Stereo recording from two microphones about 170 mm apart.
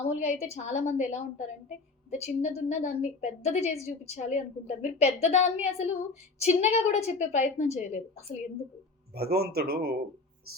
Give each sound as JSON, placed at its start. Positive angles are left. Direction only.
{"t": 0.2, "sound": "a woman's voice", "side_deg": 40}
{"t": 9.1, "sound": "a man's voice", "side_deg": -65}